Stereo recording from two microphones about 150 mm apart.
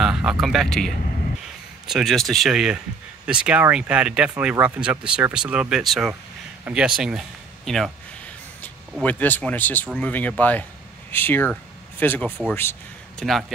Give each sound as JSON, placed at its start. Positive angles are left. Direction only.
{"t": 0.0, "sound": "a man's voice", "side_deg": -5}
{"t": 9.0, "sound": "speech", "side_deg": 10}
{"t": 13.2, "sound": "a man's voice", "side_deg": 0}